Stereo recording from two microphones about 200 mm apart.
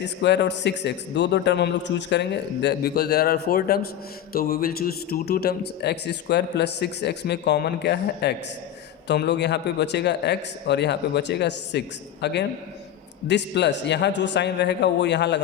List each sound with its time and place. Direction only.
0.2 s a man's voice: 60° left (ahead or behind)